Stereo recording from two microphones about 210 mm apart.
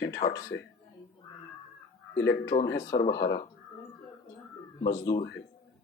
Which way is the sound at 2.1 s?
55° left (ahead or behind).